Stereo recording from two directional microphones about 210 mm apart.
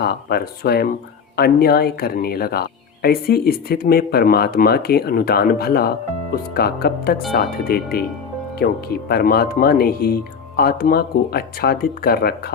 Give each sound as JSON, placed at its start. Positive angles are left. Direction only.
{"t": 0.0, "sound": "speech", "side_deg": 50}